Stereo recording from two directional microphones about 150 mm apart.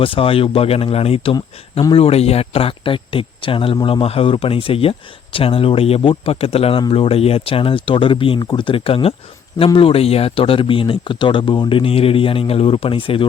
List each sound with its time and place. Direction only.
0.0 s speech: 35° left (ahead or behind)